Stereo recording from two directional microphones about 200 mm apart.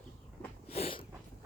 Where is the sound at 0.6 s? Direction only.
30° left (ahead or behind).